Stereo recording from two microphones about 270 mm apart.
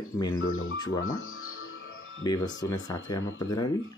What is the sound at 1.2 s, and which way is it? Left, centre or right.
Music, left.